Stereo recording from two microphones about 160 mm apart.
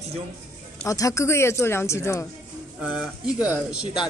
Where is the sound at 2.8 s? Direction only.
5° right (ahead or behind).